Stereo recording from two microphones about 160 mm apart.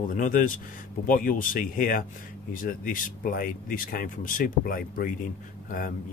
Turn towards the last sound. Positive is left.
turn(degrees=60)  # may be behind; listen again after turning